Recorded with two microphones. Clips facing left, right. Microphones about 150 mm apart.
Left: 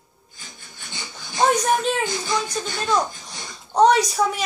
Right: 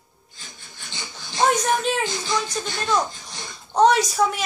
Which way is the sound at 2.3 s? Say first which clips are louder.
Left 1 dB; 10° left (ahead or behind).